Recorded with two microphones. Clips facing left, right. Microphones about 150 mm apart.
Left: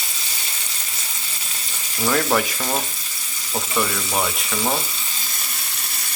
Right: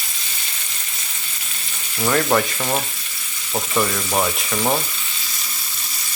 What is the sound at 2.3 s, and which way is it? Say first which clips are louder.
Speech: right 3 dB; centre (ahead or behind).